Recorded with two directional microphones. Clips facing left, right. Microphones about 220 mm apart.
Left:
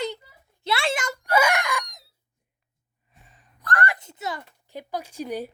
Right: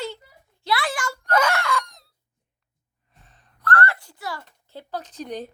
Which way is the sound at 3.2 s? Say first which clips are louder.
Even; 10° left (ahead or behind).